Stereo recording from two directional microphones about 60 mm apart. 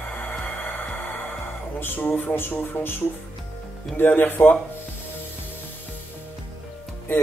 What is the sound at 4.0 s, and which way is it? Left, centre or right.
Speech, left.